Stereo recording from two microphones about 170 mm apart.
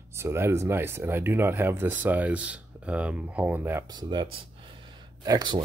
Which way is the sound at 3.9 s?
25° right (ahead or behind).